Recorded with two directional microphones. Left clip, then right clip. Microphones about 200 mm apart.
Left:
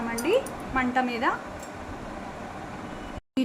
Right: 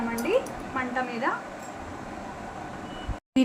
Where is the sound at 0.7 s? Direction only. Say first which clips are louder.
Left 4 dB; 55° left (ahead or behind).